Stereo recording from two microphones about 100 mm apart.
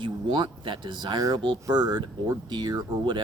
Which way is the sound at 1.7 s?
45° right (ahead or behind).